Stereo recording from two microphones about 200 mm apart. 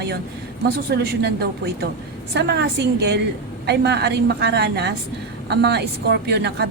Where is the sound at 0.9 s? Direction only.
55° right (ahead or behind).